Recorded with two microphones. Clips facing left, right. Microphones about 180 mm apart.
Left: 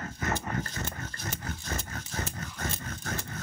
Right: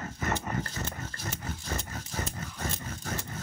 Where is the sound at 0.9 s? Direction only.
5° right (ahead or behind).